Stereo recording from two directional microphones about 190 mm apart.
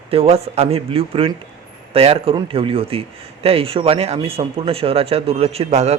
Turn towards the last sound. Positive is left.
turn(degrees=-35)  # may be behind; listen again after turning